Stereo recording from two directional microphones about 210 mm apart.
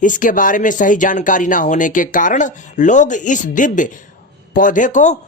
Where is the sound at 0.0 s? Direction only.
40° left (ahead or behind).